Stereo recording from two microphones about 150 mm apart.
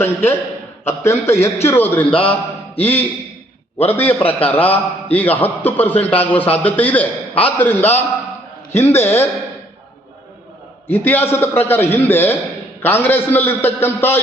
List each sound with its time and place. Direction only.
0.0 s a man's voice: 15° left (ahead or behind)
10.8 s a man's voice: 15° left (ahead or behind)